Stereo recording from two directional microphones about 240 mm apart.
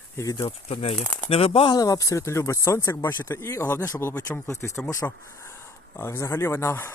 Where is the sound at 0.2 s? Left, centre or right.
Centre.